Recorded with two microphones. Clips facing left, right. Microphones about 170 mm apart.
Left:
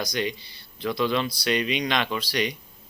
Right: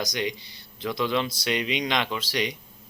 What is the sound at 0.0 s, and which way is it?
Speech, 15° right (ahead or behind).